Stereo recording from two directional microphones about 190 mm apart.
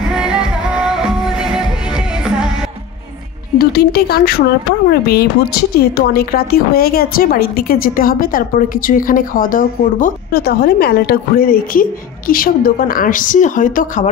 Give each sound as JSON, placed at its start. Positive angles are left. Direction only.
{"t": 0.1, "sound": "music", "side_deg": -5}
{"t": 3.5, "sound": "speech", "side_deg": 55}